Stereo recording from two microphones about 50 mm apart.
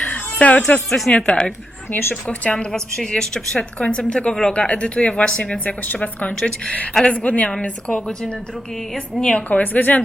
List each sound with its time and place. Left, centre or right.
0.1 s music: left
0.9 s speech: centre
1.1 s speech: centre
1.9 s a woman's voice: left
2.4 s speech: left
2.7 s speech: centre
9.1 s a woman's voice: centre
9.5 s a woman's voice: left